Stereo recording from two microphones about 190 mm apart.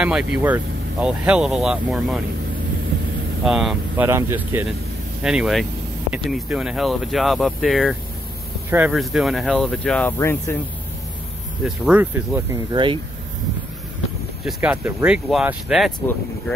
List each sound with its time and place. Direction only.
0.0 s speech: 5° right (ahead or behind)
3.4 s speech: centre (ahead or behind)
3.9 s speech: 15° right (ahead or behind); by 10.6 s 15° left (ahead or behind)
11.6 s speech: 5° right (ahead or behind)
12.7 s speech: 25° right (ahead or behind)
14.4 s speech: 5° right (ahead or behind)